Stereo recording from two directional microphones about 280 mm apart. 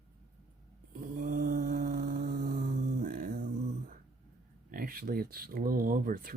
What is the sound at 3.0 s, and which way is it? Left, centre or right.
Music, right.